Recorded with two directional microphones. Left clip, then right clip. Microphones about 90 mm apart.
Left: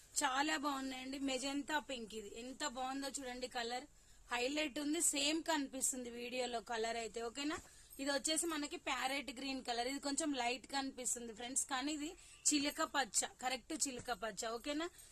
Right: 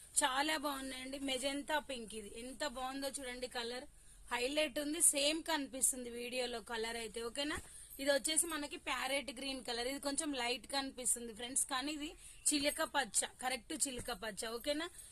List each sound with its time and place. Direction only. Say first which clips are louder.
0.2 s a woman's voice: right 2 dB; 30° left (ahead or behind)